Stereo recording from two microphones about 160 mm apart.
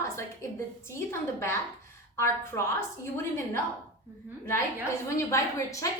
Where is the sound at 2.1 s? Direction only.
15° left (ahead or behind).